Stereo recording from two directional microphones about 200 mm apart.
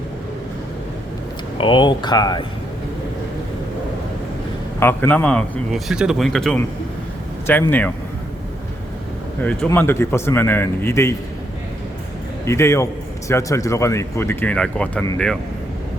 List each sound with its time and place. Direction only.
1.5 s speech: 25° left (ahead or behind)
4.8 s a man's voice: 10° left (ahead or behind)
9.4 s a man's voice: 5° left (ahead or behind)
12.5 s a man's voice: 15° left (ahead or behind)